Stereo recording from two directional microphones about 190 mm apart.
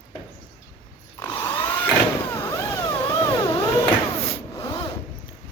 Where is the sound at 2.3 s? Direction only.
15° left (ahead or behind).